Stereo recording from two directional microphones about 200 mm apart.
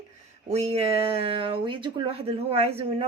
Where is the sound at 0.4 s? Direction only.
30° right (ahead or behind).